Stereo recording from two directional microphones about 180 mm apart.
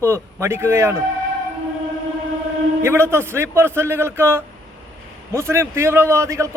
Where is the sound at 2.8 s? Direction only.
15° right (ahead or behind).